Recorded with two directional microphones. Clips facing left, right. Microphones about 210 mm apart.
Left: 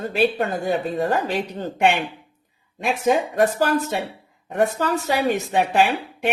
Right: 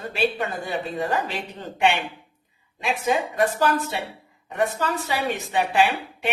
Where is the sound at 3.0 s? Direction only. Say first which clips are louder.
Left 4 dB; 45° left (ahead or behind).